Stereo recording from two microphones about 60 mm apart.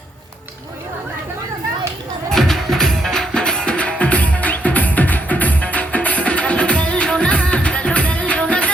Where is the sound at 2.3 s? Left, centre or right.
Centre.